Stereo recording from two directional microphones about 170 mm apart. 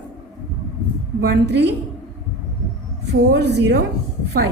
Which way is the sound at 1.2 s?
80° right.